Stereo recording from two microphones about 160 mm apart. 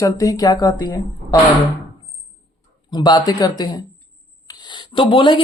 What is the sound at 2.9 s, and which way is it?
Speech, 25° left (ahead or behind).